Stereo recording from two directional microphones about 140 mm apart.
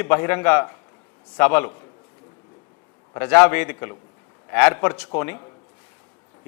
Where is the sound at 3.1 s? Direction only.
15° left (ahead or behind).